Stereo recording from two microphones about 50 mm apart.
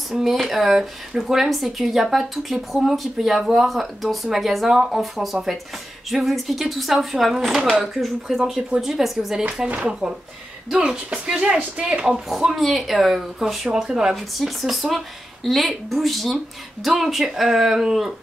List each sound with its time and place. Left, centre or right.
0.1 s speech: centre
9.4 s speech: right
12.3 s speech: centre
14.1 s speech: centre